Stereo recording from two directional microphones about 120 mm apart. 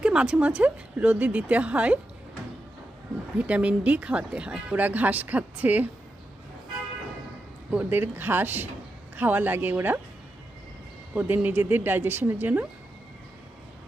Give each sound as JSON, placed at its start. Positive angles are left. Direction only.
{"t": 0.0, "sound": "speech", "side_deg": -5}
{"t": 3.3, "sound": "speech", "side_deg": -10}
{"t": 7.7, "sound": "speech", "side_deg": -15}
{"t": 11.1, "sound": "a man's voice", "side_deg": -15}